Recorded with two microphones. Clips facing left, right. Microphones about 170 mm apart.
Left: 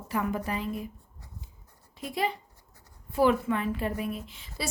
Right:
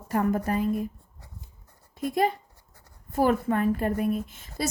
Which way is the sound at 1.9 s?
50° right (ahead or behind).